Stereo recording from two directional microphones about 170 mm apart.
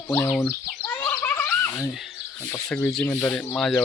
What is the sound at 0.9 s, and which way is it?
Gargling, 10° left (ahead or behind).